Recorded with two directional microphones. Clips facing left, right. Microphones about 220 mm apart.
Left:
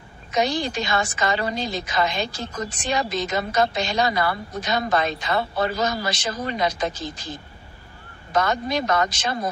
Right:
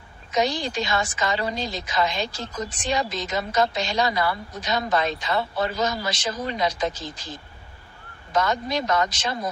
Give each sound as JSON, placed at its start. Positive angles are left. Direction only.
{"t": 0.3, "sound": "a woman's voice", "side_deg": 55}